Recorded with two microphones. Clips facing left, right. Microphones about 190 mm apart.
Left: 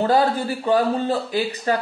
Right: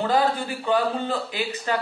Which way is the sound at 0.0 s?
40° left (ahead or behind).